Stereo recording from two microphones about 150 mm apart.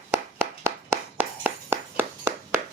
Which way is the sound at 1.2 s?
15° right (ahead or behind).